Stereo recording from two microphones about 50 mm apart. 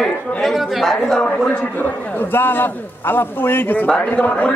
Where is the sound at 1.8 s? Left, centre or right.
Left.